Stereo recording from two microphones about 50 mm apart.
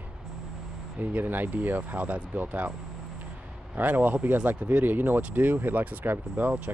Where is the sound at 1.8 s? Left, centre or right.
Right.